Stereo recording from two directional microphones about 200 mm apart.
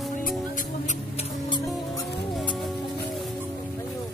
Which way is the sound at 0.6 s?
35° left (ahead or behind).